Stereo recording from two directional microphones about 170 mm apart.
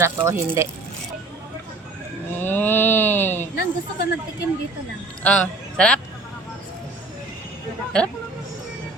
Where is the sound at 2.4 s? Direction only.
10° left (ahead or behind).